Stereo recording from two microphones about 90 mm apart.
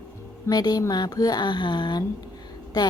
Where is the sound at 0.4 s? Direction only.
45° left (ahead or behind).